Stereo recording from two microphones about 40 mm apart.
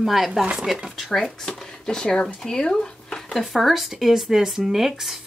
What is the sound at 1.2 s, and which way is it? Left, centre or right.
Speech, centre.